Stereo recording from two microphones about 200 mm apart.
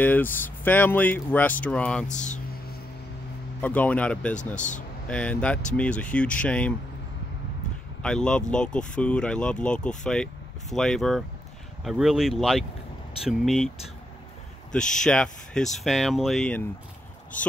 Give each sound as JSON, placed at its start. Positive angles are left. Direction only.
{"t": 0.0, "sound": "speech", "side_deg": 10}
{"t": 2.0, "sound": "speech", "side_deg": 35}
{"t": 3.6, "sound": "speech", "side_deg": 5}
{"t": 4.6, "sound": "speech", "side_deg": 40}
{"t": 5.0, "sound": "speech", "side_deg": 5}
{"t": 8.0, "sound": "speech", "side_deg": 5}
{"t": 14.7, "sound": "speech", "side_deg": 5}